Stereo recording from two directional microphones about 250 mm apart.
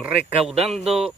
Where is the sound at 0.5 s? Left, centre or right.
Right.